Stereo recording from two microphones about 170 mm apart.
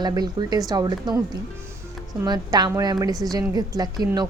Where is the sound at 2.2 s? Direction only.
25° right (ahead or behind).